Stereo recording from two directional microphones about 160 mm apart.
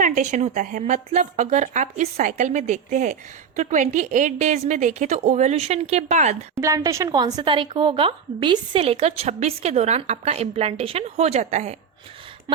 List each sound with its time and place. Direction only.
0.0 s speech: 50° right (ahead or behind)
6.6 s a woman's voice: 20° right (ahead or behind); by 11.8 s 45° right (ahead or behind)